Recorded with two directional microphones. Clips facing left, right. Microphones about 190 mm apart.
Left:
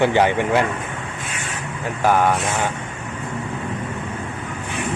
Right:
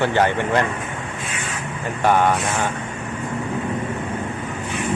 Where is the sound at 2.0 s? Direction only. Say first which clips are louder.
Even; 5° left (ahead or behind).